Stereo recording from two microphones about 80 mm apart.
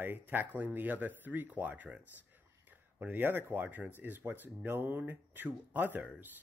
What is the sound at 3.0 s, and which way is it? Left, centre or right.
Speech, right.